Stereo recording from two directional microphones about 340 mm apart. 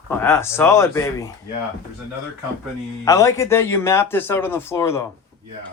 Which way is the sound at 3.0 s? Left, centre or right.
Centre.